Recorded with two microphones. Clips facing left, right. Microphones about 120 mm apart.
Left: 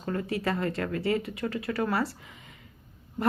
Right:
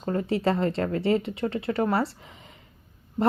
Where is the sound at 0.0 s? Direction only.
30° right (ahead or behind).